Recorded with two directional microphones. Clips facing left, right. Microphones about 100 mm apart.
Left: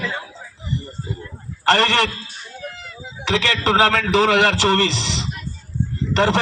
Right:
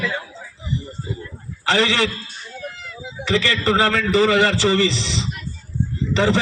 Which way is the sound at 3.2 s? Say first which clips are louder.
Even; 65° left (ahead or behind).